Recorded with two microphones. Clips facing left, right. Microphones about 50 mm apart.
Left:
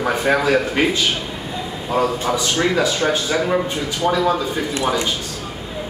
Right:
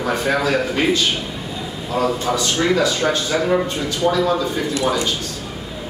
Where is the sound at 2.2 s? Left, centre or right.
Centre.